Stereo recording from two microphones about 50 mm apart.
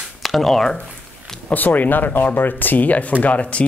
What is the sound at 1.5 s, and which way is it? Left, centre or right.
Speech, left.